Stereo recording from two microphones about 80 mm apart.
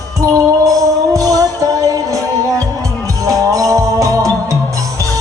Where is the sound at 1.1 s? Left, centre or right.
Right.